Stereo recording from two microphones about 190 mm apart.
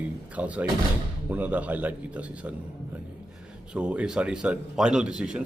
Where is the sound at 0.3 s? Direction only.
5° right (ahead or behind).